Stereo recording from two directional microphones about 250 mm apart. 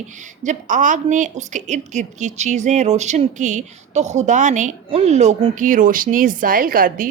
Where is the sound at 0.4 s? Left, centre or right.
Right.